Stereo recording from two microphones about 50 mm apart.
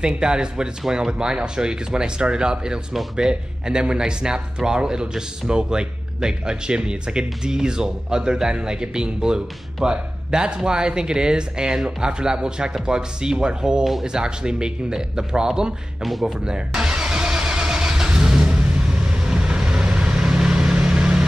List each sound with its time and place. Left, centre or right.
0.0 s speech: centre
16.0 s speech: centre
16.3 s vehicle: centre